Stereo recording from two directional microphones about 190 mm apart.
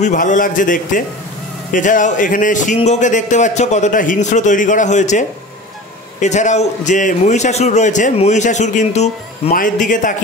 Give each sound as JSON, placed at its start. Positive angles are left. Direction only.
{"t": 0.0, "sound": "a man's voice", "side_deg": 40}